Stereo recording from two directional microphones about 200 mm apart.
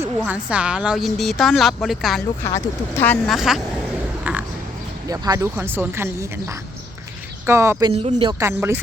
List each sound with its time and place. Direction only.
0.3 s a woman's voice: 5° right (ahead or behind)
2.4 s speech: 15° left (ahead or behind); by 3.6 s centre (ahead or behind)
4.2 s a sound: 5° right (ahead or behind)
5.0 s speech: 20° right (ahead or behind)
7.9 s speech: 30° right (ahead or behind)
8.4 s speech: 10° right (ahead or behind)